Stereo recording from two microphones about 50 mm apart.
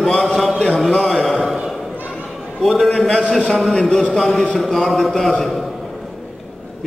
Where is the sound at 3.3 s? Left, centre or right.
Left.